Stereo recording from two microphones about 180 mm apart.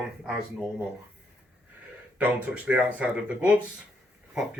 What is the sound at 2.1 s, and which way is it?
Speech, 10° right (ahead or behind).